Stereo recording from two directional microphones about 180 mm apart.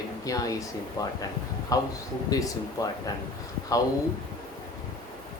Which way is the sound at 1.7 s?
20° left (ahead or behind).